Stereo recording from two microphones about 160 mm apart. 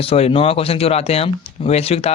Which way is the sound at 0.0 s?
35° left (ahead or behind).